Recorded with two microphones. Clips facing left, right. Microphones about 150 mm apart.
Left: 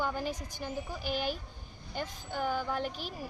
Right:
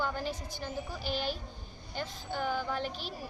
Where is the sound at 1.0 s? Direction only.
50° left (ahead or behind).